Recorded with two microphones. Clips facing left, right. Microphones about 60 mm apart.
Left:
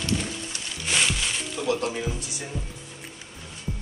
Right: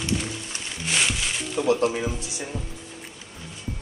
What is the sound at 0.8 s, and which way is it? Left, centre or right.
Music, centre.